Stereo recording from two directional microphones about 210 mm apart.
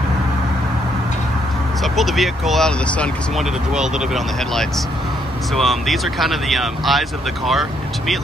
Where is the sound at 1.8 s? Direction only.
Centre (ahead or behind).